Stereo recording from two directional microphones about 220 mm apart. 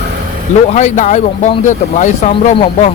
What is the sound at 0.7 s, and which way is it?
Speech, 35° left (ahead or behind).